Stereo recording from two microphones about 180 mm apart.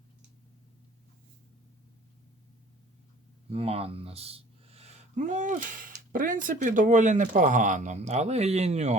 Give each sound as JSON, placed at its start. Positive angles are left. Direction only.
{"t": 3.5, "sound": "speech", "side_deg": -35}